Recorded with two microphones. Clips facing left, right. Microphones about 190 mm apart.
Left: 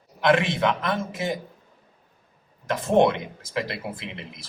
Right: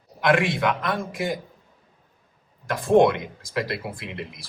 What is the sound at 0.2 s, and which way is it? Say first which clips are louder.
Speech: even; 25° left (ahead or behind).